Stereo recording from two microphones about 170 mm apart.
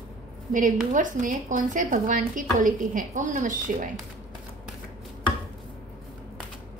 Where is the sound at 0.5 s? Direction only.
50° right (ahead or behind).